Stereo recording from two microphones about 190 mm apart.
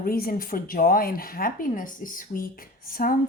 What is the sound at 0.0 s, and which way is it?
Speech, 50° left (ahead or behind).